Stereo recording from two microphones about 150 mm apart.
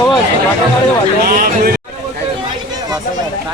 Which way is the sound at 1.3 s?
80° right.